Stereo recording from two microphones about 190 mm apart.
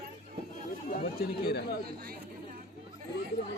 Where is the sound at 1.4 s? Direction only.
60° left (ahead or behind).